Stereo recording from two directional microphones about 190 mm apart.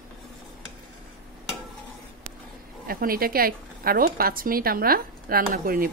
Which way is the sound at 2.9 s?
50° right (ahead or behind).